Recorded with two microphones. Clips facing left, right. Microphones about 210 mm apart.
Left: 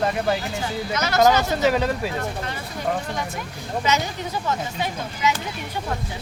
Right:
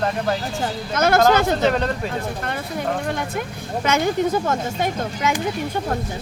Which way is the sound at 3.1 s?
60° right (ahead or behind).